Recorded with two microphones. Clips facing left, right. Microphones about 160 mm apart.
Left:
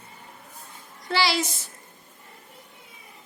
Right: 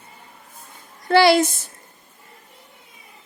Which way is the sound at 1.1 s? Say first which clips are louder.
Right 11 dB; 55° right (ahead or behind).